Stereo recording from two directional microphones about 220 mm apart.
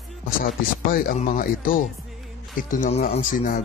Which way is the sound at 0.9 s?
40° left (ahead or behind).